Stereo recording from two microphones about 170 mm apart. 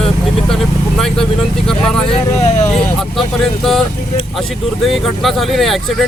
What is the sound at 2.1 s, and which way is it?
Speech, 40° left (ahead or behind).